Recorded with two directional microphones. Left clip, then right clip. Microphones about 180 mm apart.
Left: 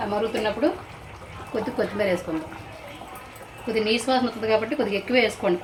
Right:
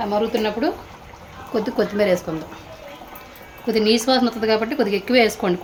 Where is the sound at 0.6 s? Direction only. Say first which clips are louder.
Right 1 dB; 65° right (ahead or behind).